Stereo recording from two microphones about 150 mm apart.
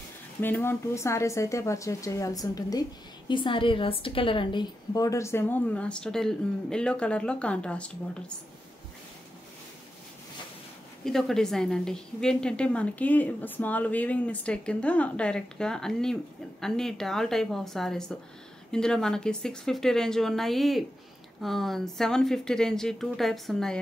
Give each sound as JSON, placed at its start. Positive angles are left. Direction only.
{"t": 0.4, "sound": "a woman's voice", "side_deg": 15}
{"t": 11.1, "sound": "a woman's voice", "side_deg": 0}